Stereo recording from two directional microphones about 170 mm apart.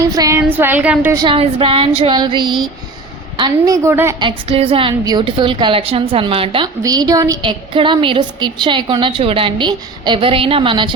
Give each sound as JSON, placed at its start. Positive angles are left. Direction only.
{"t": 0.0, "sound": "a woman's voice", "side_deg": -20}
{"t": 1.2, "sound": "a woman's voice", "side_deg": -30}
{"t": 3.8, "sound": "a woman's voice", "side_deg": -15}
{"t": 4.2, "sound": "a woman's voice", "side_deg": -30}
{"t": 6.8, "sound": "a woman's voice", "side_deg": -20}